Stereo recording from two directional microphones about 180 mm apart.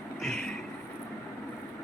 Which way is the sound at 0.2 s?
Centre (ahead or behind).